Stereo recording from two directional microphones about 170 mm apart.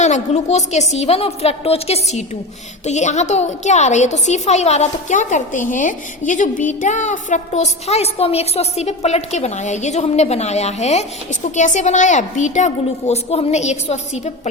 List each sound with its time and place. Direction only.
0.0 s a woman's voice: 45° left (ahead or behind)